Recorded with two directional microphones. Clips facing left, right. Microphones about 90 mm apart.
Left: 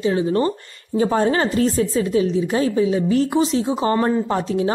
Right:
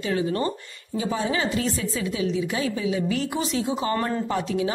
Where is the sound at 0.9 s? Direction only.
45° left (ahead or behind).